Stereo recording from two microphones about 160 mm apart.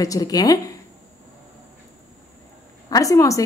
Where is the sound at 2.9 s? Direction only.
20° left (ahead or behind).